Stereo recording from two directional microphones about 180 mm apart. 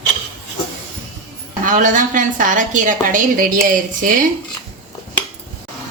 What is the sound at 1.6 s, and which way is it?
A woman's voice, 45° right (ahead or behind).